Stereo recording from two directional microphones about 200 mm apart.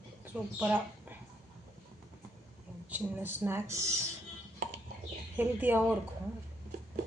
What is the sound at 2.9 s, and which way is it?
Speech, 10° right (ahead or behind).